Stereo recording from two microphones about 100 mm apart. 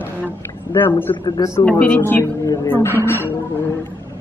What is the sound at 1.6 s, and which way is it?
Speech, 10° left (ahead or behind).